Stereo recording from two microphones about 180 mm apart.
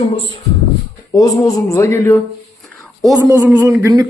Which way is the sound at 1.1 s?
20° left (ahead or behind).